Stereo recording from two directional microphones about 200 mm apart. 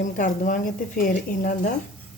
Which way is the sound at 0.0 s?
40° left (ahead or behind).